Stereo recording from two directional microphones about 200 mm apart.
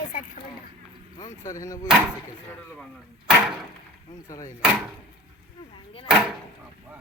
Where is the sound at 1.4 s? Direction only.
15° left (ahead or behind).